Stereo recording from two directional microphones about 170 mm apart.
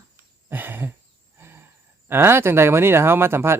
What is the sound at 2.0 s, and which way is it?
Speech, 15° right (ahead or behind).